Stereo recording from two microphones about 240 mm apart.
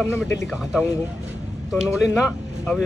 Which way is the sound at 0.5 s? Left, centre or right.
Centre.